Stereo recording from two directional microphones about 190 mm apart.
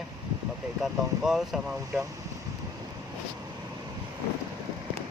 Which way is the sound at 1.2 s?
Centre (ahead or behind).